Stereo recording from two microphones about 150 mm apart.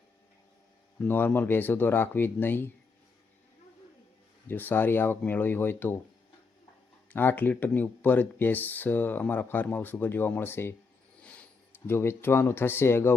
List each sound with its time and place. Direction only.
0.9 s speech: 15° left (ahead or behind)
4.4 s speech: 15° left (ahead or behind)
7.1 s speech: 15° left (ahead or behind)
11.2 s a sound: 10° left (ahead or behind)
11.9 s speech: 15° left (ahead or behind)